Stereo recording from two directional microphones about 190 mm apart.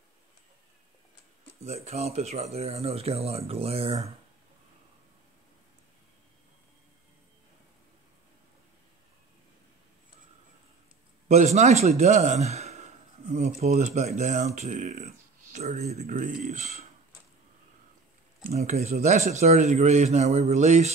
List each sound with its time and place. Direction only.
1.6 s a man's voice: 35° right (ahead or behind)
11.2 s a man's voice: 35° right (ahead or behind)
18.5 s a man's voice: 35° right (ahead or behind)